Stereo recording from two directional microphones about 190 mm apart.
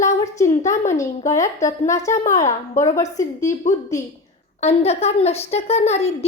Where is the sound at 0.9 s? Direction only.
15° left (ahead or behind).